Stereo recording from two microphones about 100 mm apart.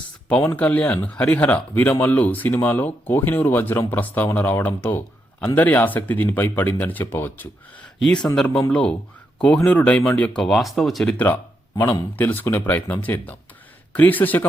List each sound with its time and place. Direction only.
0.3 s speech: 15° left (ahead or behind)
7.9 s speech: 5° left (ahead or behind)
10.4 s speech: centre (ahead or behind)
12.1 s speech: 20° left (ahead or behind)